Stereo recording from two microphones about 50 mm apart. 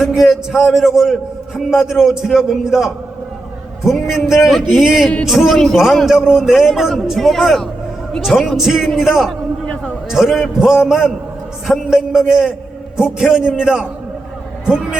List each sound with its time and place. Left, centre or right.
0.0 s a man's voice: centre
6.1 s a man's voice: centre